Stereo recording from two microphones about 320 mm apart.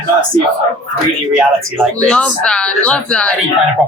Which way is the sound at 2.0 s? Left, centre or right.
Centre.